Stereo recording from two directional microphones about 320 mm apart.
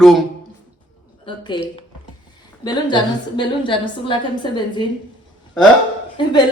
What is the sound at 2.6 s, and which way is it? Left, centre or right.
A woman's voice, centre.